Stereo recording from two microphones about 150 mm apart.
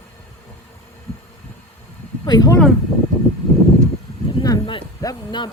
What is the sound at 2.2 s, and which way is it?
Speech, 25° left (ahead or behind).